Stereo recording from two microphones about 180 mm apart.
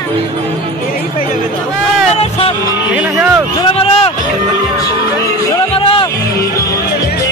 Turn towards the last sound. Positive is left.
turn(degrees=30)  # may be behind; listen again after turning